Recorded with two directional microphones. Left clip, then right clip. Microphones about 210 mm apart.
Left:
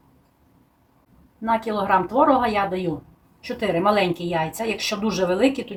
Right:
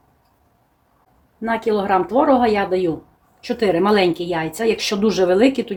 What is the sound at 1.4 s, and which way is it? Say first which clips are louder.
Speech: right 3 dB; 35° right (ahead or behind).